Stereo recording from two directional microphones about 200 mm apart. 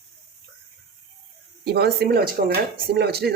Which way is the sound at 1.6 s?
55° right (ahead or behind).